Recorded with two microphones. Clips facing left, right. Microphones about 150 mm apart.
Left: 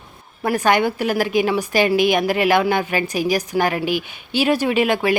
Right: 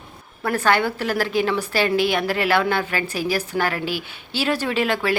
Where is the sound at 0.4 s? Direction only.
15° left (ahead or behind).